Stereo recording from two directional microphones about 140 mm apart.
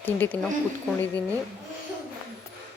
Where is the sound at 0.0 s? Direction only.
15° left (ahead or behind).